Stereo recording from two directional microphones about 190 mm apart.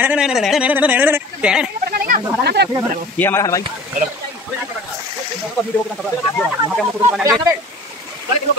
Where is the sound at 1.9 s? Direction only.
55° right (ahead or behind).